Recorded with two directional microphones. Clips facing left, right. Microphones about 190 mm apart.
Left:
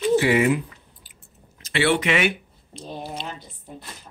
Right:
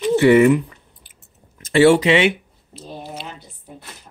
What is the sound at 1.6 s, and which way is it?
Speech, 45° right (ahead or behind).